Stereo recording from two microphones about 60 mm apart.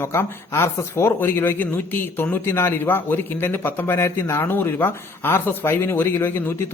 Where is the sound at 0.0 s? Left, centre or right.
Left.